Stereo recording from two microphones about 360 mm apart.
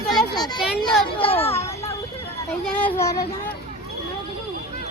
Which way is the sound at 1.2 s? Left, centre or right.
Centre.